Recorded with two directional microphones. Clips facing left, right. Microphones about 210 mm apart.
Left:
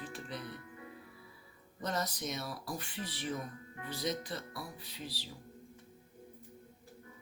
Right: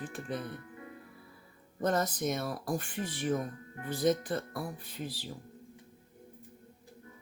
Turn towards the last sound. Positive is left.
turn(degrees=-50)  # may be behind; listen again after turning